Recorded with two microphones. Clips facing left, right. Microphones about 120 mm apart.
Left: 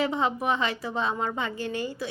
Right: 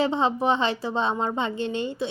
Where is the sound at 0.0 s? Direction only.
30° right (ahead or behind).